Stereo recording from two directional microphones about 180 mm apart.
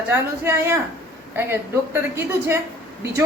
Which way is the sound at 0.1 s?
15° right (ahead or behind).